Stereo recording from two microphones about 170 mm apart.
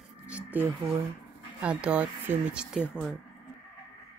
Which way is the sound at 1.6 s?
5° right (ahead or behind).